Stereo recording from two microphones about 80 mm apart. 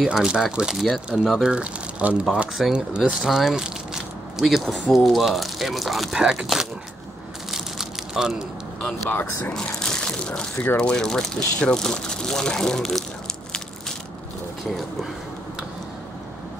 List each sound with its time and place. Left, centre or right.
0.0 s speech: centre
1.5 s speech: centre
7.5 s crushing: centre
9.1 s speech: left
9.5 s a sound: centre
10.8 s speech: centre